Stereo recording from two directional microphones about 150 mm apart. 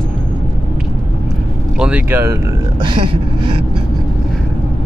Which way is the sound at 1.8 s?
10° right (ahead or behind).